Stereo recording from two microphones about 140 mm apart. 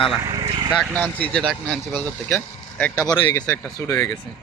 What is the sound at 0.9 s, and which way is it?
Speech, 10° left (ahead or behind).